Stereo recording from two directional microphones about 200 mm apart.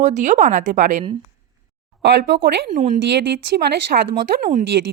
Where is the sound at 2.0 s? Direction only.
55° right (ahead or behind).